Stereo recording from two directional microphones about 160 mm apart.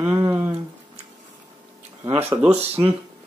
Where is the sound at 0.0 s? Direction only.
15° right (ahead or behind).